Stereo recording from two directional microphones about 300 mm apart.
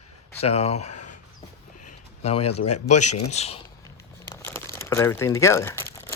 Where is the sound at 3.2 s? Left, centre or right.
Left.